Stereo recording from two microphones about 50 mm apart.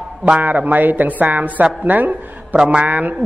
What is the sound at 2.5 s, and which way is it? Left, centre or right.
Speech, right.